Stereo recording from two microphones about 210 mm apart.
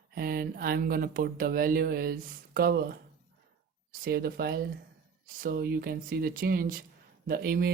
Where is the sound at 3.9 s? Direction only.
45° right (ahead or behind).